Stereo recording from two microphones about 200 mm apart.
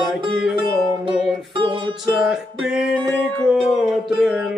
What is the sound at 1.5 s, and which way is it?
Music, 25° right (ahead or behind).